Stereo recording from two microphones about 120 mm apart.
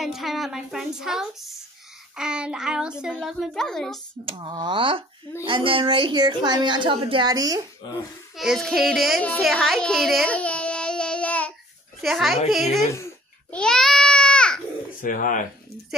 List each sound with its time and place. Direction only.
0.0 s a woman's voice: centre (ahead or behind)
2.1 s child singing: 5° right (ahead or behind)
3.0 s a woman's voice: 5° right (ahead or behind)
4.2 s a woman's voice: 45° right (ahead or behind); by 7.6 s 30° right (ahead or behind)
7.8 s speech: 40° left (ahead or behind)
8.4 s a woman's voice: centre (ahead or behind)
9.4 s a sound: centre (ahead or behind)
12.0 s a woman's voice: centre (ahead or behind)
13.5 s a sound: 5° left (ahead or behind)
15.0 s speech: 90° left